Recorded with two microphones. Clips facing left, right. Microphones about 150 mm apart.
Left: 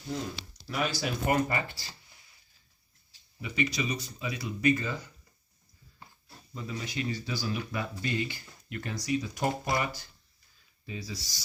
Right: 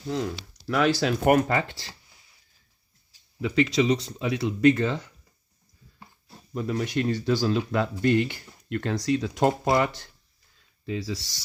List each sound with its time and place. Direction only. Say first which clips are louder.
0.1 s speech: right 6 dB; 75° right (ahead or behind)
3.4 s speech: right 9 dB; 90° right
6.5 s speech: right 10 dB; 70° right (ahead or behind)
10.8 s speech: right 9 dB; 85° right